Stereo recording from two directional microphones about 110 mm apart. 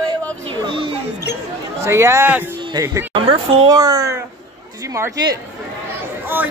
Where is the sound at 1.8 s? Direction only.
25° right (ahead or behind).